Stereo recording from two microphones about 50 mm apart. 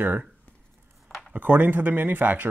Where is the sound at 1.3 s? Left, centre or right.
Right.